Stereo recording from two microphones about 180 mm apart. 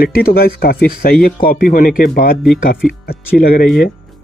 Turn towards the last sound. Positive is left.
turn(degrees=55)  # may be behind; listen again after turning